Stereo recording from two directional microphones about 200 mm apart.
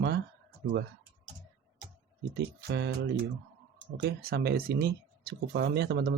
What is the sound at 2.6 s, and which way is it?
Speech, 55° right (ahead or behind).